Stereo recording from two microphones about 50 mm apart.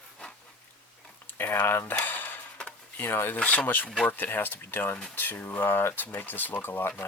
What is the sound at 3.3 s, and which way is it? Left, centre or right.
Speech, left.